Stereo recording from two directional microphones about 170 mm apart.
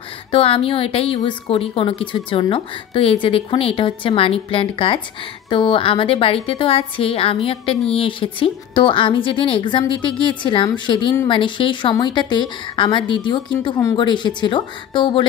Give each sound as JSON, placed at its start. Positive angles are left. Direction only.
{"t": 0.3, "sound": "a woman's voice", "side_deg": 35}